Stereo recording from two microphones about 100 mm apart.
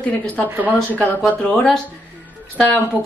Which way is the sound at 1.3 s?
10° left (ahead or behind).